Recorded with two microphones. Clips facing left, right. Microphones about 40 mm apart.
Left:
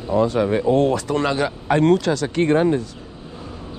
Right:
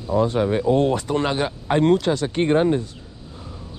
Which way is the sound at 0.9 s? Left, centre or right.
Left.